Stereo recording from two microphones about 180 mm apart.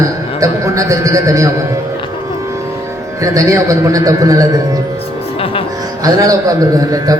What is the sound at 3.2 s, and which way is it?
A man's voice, 20° right (ahead or behind).